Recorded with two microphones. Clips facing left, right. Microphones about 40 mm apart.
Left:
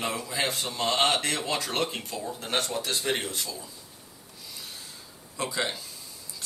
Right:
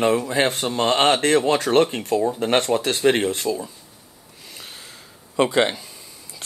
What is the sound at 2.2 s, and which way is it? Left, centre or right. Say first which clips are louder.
Speech: right 10 dB; right.